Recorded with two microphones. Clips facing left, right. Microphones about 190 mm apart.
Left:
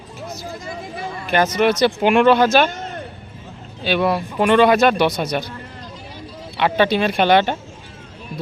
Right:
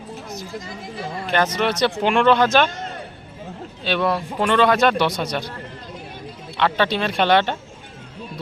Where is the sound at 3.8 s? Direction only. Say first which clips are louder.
Left 3 dB; 10° left (ahead or behind).